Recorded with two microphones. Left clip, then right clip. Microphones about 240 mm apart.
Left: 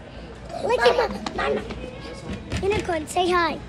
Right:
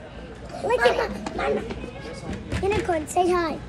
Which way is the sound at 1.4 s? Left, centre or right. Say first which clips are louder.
Right 1 dB; centre.